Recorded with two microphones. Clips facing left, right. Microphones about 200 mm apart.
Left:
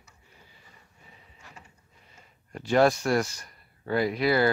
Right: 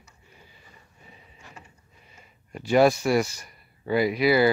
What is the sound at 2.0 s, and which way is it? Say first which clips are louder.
Speech: right 2 dB; 10° right (ahead or behind).